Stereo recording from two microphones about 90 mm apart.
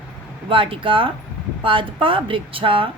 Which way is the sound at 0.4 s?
75° right (ahead or behind).